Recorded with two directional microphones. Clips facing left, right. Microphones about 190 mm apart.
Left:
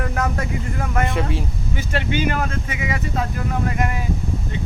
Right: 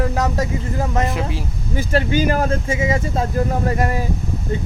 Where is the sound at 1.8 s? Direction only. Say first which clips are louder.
Right 5 dB; 40° right (ahead or behind).